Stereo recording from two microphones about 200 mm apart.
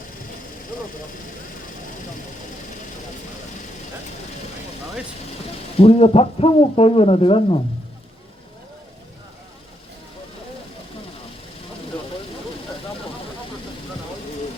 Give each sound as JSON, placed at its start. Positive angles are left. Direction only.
{"t": 5.8, "sound": "speech", "side_deg": 30}